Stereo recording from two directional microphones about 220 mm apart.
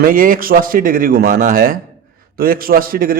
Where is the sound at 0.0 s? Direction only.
40° right (ahead or behind).